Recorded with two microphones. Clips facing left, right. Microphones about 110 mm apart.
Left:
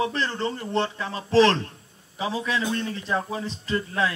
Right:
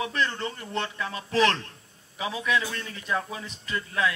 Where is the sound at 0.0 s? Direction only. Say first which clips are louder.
Left 3 dB; 30° left (ahead or behind).